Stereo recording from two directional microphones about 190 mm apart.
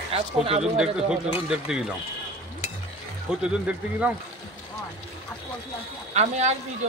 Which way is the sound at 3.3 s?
5° right (ahead or behind).